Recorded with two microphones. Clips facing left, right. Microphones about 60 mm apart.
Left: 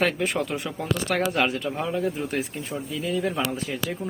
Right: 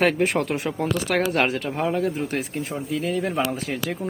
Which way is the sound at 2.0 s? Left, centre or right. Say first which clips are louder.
Right 2 dB; right.